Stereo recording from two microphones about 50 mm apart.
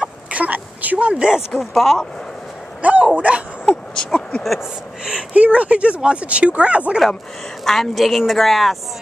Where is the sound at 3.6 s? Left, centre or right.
Centre.